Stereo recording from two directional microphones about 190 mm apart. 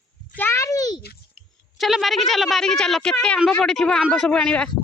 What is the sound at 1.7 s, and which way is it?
Speech, centre (ahead or behind).